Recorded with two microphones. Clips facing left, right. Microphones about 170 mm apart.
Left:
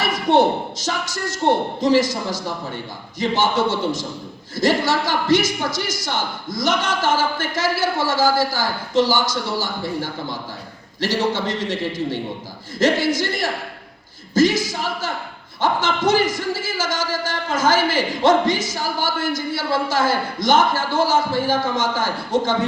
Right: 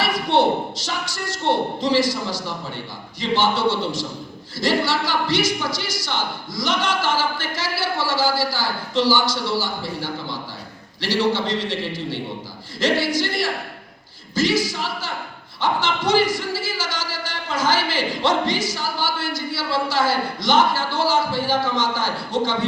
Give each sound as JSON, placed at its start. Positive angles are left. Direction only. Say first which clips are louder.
{"t": 0.0, "sound": "a sound", "louder": "left 3 dB", "side_deg": 45}
{"t": 0.9, "sound": "a man's voice", "louder": "left 3 dB", "side_deg": 45}
{"t": 14.6, "sound": "a man's voice", "louder": "left 2 dB", "side_deg": 45}